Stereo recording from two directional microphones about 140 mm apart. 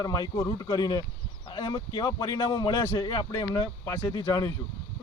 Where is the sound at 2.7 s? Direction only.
20° left (ahead or behind).